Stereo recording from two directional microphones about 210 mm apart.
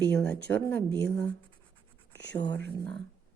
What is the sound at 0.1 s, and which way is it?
Speech, 5° left (ahead or behind).